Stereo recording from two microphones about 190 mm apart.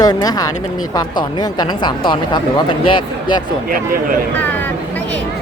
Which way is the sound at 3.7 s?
45° right (ahead or behind).